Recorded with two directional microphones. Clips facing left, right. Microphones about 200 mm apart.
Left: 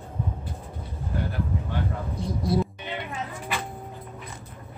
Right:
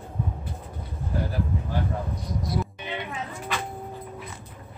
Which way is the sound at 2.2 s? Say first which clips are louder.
Left 5 dB; 30° left (ahead or behind).